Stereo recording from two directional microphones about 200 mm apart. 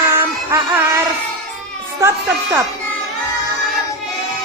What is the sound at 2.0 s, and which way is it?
Music, 10° right (ahead or behind).